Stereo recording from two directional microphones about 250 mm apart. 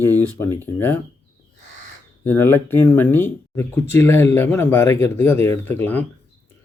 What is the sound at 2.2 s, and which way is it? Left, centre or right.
Speech, centre.